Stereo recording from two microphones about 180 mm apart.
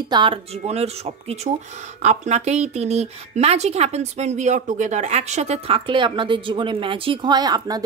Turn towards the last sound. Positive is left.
turn(degrees=-20)  # may be behind; listen again after turning